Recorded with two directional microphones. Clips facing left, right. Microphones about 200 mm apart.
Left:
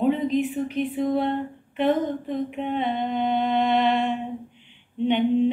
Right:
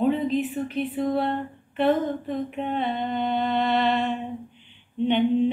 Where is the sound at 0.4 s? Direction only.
15° left (ahead or behind).